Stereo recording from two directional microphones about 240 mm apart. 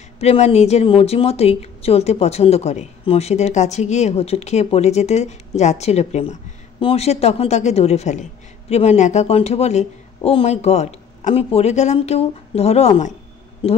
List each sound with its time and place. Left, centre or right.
0.2 s a woman's voice: left